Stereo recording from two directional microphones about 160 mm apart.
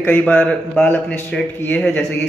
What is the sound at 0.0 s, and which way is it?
A man's voice, 10° left (ahead or behind).